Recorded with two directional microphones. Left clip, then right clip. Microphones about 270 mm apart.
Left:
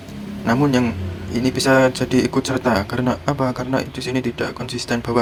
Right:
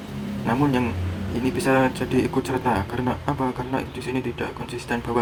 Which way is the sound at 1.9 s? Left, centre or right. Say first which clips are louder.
Left 4 dB; left.